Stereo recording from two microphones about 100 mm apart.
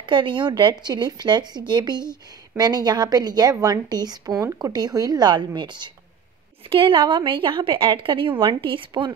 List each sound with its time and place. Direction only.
0.0 s a woman's voice: 55° right (ahead or behind)